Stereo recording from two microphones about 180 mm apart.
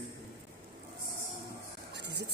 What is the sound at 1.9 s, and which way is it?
Music, 70° right (ahead or behind).